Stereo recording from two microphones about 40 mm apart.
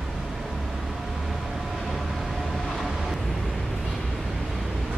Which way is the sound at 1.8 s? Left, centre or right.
Centre.